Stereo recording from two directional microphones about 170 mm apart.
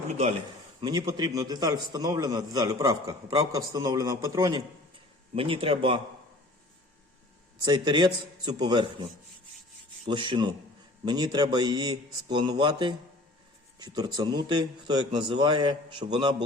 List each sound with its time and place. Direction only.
0.8 s a man's voice: 25° right (ahead or behind)
5.3 s speech: 30° right (ahead or behind)
7.6 s a man's voice: 25° right (ahead or behind)
10.1 s a man's voice: 25° right (ahead or behind)